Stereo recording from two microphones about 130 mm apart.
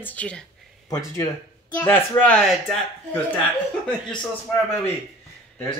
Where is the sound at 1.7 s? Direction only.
15° left (ahead or behind).